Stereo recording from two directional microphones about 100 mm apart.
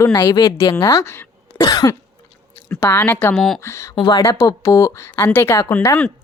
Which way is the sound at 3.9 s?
55° left (ahead or behind).